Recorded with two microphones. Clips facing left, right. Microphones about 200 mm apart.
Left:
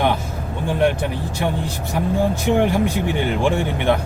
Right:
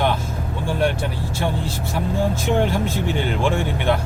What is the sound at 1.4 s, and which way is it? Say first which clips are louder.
Speech: left 1 dB; 15° left (ahead or behind).